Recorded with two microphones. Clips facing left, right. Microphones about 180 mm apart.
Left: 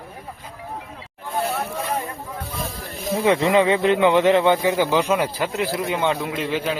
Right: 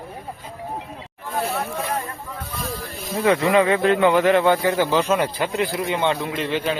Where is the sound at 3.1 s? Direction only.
25° left (ahead or behind).